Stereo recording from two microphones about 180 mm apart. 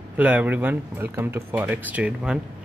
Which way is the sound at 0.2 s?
10° right (ahead or behind).